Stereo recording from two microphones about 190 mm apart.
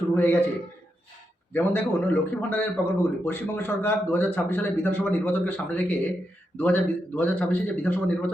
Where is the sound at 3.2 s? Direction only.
10° left (ahead or behind).